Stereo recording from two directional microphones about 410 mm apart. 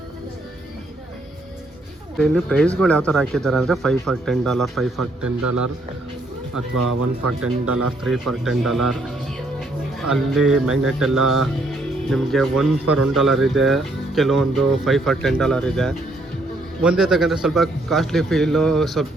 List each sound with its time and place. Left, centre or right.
2.1 s speech: centre
5.4 s speech: right
8.0 s speech: centre